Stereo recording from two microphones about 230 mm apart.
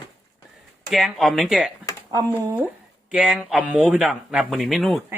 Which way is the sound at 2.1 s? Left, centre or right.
Centre.